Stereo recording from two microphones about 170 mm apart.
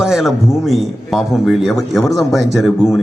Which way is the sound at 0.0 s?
Centre (ahead or behind).